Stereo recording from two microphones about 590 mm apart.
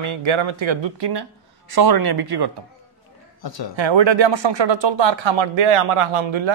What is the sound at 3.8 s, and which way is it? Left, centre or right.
Speech, right.